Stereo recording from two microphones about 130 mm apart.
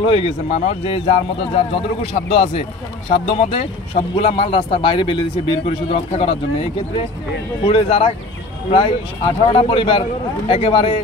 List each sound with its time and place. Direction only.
0.0 s a man's voice: 50° left (ahead or behind)